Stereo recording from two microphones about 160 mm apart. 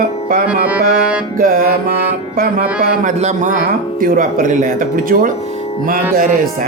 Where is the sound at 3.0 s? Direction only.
50° right (ahead or behind).